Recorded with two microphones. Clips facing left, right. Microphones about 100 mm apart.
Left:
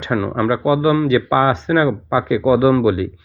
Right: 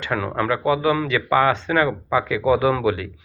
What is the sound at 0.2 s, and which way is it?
Speech, 10° left (ahead or behind).